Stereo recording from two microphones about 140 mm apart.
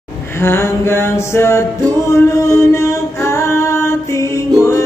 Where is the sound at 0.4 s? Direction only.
15° left (ahead or behind).